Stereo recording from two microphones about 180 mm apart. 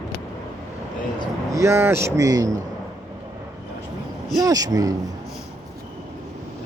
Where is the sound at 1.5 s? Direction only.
15° right (ahead or behind).